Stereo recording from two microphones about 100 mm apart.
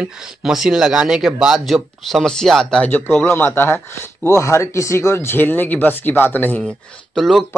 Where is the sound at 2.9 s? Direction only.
15° left (ahead or behind).